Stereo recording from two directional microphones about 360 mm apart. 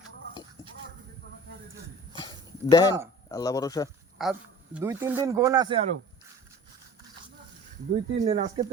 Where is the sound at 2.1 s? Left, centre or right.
Centre.